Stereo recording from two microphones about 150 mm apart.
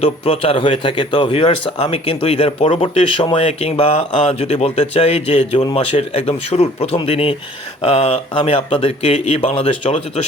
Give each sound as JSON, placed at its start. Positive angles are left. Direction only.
{"t": 0.0, "sound": "speech", "side_deg": 35}